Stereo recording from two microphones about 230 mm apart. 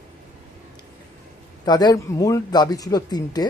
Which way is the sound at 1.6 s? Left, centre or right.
Centre.